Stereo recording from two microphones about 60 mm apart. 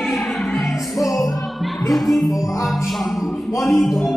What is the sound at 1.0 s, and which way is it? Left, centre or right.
Music, left.